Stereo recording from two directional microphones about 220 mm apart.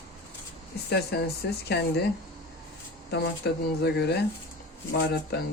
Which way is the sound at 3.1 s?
50° left (ahead or behind).